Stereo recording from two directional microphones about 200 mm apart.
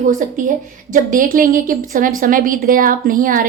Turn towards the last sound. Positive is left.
turn(degrees=-45)  # may be behind; listen again after turning